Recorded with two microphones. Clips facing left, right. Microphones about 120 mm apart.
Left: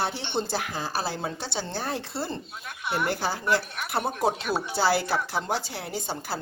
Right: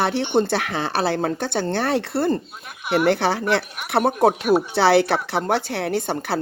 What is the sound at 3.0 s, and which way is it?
A woman's voice, 70° right (ahead or behind).